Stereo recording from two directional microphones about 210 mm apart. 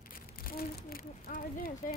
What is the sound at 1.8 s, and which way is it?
Speech, 40° left (ahead or behind).